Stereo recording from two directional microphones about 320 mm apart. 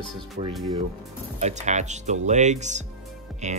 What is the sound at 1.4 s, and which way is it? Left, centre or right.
Speech, right.